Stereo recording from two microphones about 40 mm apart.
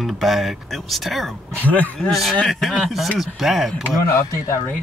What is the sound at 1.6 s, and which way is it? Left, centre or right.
Speech, left.